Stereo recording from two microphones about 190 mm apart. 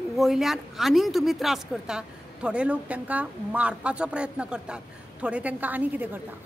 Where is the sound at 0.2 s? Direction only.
Centre (ahead or behind).